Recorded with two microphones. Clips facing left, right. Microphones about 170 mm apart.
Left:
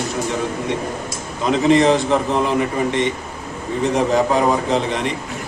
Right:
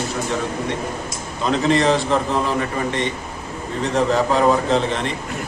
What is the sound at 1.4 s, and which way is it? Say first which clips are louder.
Speech: left 3 dB; 15° left (ahead or behind).